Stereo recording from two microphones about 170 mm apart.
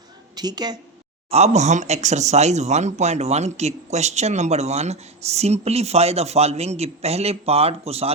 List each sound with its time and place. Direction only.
0.3 s a woman's voice: 25° right (ahead or behind)
1.3 s speech: 40° right (ahead or behind)